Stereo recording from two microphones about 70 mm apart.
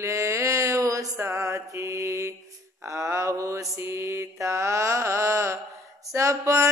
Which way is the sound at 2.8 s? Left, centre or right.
Right.